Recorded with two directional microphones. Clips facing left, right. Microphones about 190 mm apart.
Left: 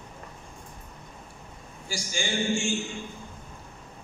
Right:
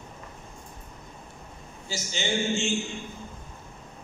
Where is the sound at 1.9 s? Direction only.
20° right (ahead or behind).